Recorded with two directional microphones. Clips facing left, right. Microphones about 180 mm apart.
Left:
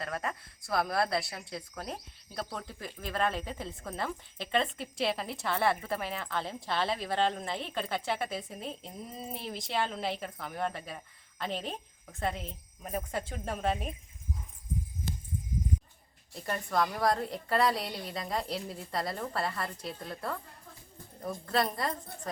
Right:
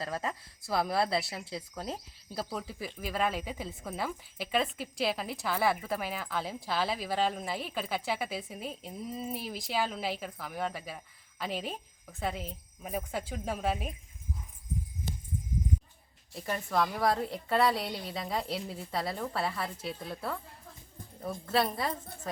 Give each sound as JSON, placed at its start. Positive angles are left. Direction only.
{"t": 0.0, "sound": "speech", "side_deg": -25}
{"t": 0.6, "sound": "a woman's voice", "side_deg": 0}
{"t": 16.3, "sound": "a woman's voice", "side_deg": 0}